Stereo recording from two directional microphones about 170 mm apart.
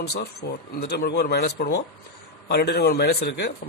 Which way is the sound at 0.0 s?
75° left (ahead or behind).